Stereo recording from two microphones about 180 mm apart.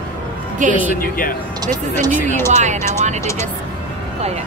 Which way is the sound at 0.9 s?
50° left (ahead or behind).